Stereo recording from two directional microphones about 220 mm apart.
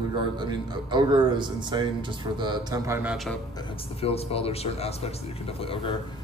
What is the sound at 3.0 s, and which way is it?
Speech, centre (ahead or behind).